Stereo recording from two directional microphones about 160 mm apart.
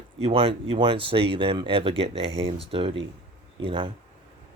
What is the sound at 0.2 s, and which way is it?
Speech, 35° right (ahead or behind).